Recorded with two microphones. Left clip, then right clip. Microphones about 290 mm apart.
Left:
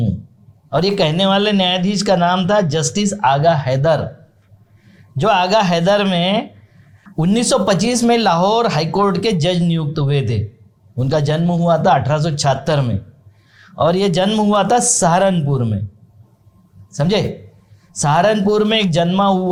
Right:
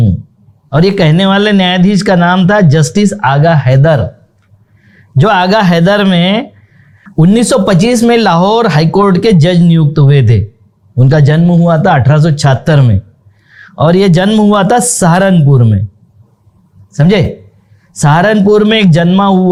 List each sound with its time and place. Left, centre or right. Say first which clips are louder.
0.7 s speech: right 6 dB; right
5.1 s speech: right 5 dB; right
16.9 s speech: right 7 dB; right